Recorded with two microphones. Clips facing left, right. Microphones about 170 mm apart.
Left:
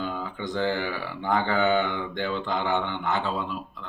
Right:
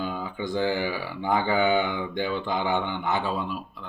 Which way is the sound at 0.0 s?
10° right (ahead or behind).